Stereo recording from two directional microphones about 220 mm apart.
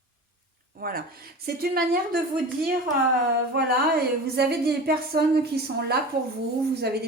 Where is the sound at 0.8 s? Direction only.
40° right (ahead or behind).